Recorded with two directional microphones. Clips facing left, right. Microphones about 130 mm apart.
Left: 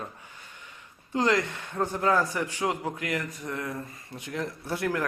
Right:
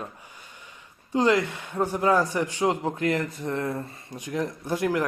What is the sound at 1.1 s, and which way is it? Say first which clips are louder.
A man's voice: right 3 dB; 15° right (ahead or behind).